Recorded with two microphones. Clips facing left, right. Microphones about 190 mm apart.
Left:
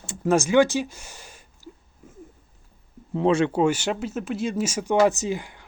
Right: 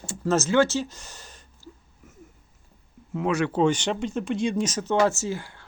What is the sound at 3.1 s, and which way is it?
Speech, 30° left (ahead or behind).